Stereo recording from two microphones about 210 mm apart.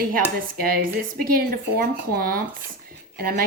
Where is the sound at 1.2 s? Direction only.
45° right (ahead or behind).